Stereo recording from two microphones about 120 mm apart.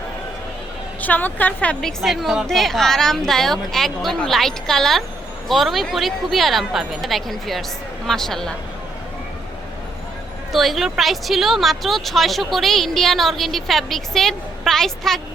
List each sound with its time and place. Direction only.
1.0 s a woman's voice: 15° left (ahead or behind)
2.0 s speech: centre (ahead or behind)
10.5 s speech: centre (ahead or behind)